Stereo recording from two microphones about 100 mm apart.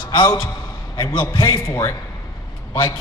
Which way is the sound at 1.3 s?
40° left (ahead or behind).